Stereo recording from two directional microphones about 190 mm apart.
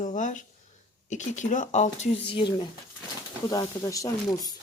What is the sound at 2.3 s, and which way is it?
Speech, 25° left (ahead or behind).